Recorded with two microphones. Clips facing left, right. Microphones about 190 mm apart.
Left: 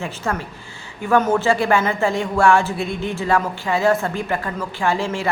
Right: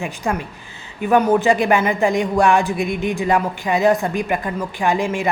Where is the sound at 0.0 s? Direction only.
15° right (ahead or behind).